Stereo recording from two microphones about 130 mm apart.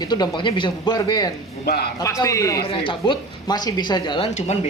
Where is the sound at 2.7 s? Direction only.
40° left (ahead or behind).